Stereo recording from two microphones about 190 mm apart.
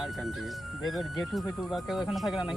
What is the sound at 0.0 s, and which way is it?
Speech, centre (ahead or behind).